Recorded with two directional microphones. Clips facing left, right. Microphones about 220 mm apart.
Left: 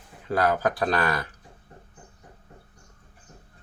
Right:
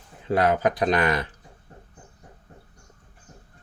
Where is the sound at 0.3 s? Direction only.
20° right (ahead or behind).